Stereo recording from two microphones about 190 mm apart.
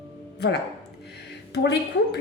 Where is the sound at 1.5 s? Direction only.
60° left (ahead or behind).